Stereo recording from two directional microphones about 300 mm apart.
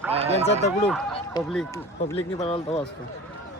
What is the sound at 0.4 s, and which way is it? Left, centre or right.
Speech, left.